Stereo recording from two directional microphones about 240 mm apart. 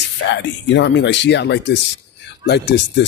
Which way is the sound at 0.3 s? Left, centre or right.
Left.